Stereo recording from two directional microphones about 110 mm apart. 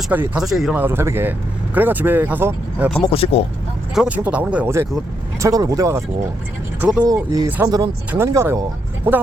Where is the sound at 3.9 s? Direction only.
10° right (ahead or behind).